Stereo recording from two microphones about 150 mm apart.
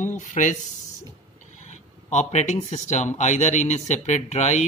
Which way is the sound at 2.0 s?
50° left (ahead or behind).